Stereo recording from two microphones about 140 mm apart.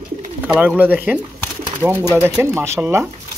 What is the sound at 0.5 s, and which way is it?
Speech, 10° right (ahead or behind).